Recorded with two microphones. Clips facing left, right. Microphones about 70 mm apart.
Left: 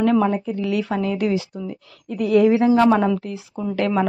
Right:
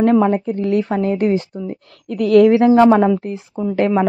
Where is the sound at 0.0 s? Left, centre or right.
Right.